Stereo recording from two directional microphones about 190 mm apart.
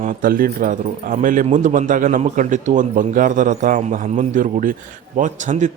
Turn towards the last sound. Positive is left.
turn(degrees=-40)  # may be behind; listen again after turning